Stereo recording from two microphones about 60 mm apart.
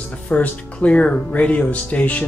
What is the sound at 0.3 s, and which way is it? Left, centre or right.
Speech, left.